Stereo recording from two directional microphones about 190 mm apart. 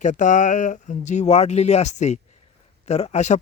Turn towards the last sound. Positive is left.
turn(degrees=35)  # may be behind; listen again after turning